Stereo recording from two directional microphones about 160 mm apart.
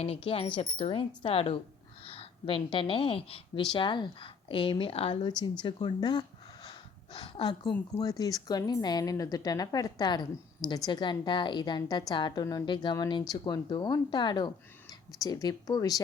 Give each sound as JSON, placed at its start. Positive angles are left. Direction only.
{"t": 0.0, "sound": "a woman's voice", "side_deg": 35}